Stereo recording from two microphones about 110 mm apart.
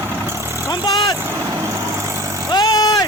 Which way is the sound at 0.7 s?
30° left (ahead or behind).